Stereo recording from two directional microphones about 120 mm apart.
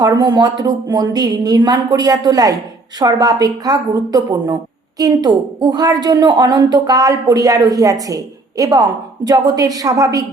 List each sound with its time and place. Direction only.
0.0 s a woman's voice: 35° right (ahead or behind)